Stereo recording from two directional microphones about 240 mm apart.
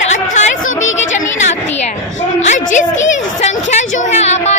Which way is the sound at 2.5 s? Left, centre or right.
Left.